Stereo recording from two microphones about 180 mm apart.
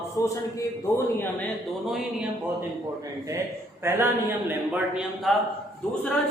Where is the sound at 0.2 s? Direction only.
15° left (ahead or behind).